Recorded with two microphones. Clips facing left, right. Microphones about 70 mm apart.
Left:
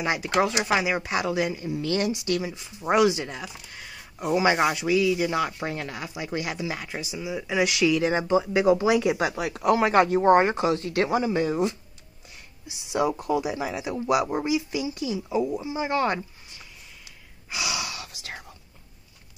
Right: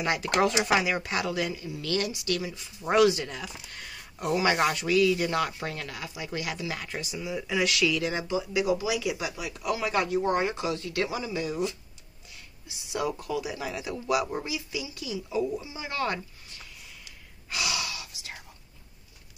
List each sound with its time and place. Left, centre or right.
0.0 s speech: centre
3.7 s a sound: centre
4.4 s speech: centre
5.6 s speech: left
12.6 s speech: left
17.5 s gasp: centre
17.9 s whispering: left